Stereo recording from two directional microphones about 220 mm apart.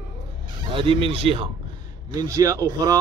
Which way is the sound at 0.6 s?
20° right (ahead or behind).